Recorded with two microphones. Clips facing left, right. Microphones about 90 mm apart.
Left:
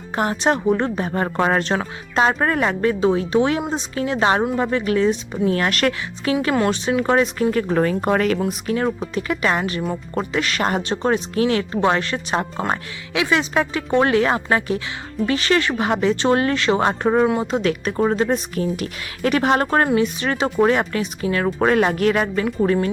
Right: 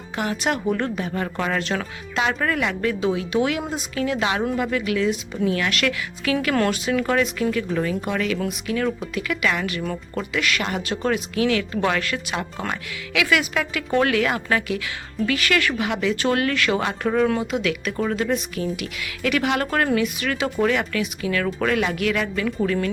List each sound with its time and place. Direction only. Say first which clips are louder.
0.2 s speech: left 4 dB; 35° left (ahead or behind)
8.4 s speech: left 3 dB; 35° left (ahead or behind)